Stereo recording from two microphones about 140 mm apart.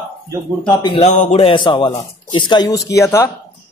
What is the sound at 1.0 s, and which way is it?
A man's voice, 55° left (ahead or behind).